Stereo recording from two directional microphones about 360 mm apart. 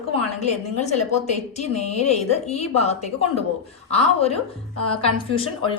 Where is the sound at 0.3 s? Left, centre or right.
Centre.